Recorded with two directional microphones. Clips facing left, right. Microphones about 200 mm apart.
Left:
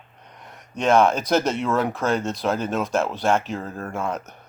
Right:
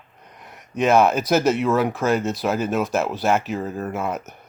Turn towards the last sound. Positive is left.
turn(degrees=-5)  # may be behind; listen again after turning